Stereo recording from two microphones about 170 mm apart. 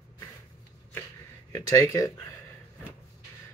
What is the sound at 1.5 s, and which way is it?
Speech, 15° left (ahead or behind).